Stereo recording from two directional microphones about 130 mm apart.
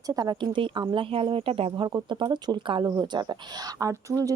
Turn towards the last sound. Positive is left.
turn(degrees=-25)  # may be behind; listen again after turning